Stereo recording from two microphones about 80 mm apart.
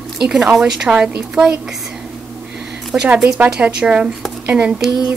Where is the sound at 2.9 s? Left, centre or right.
Centre.